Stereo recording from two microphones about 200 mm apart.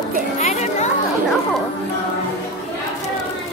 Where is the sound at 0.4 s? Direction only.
35° left (ahead or behind).